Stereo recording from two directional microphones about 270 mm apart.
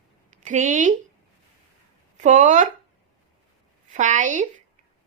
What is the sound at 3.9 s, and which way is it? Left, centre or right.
Speech, right.